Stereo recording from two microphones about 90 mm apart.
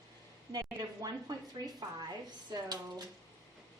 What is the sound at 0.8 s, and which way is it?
A woman's voice, 50° right (ahead or behind).